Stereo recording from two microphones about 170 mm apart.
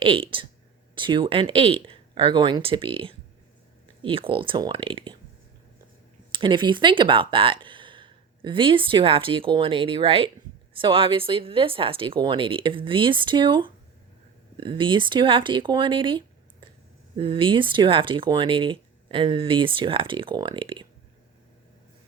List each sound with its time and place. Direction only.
0.0 s speech: 30° right (ahead or behind)
6.3 s speech: 30° right (ahead or behind)